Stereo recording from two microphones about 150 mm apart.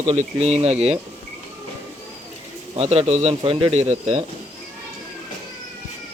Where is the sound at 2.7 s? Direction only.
40° right (ahead or behind).